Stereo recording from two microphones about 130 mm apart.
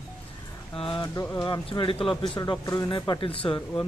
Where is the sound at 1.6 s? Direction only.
40° left (ahead or behind).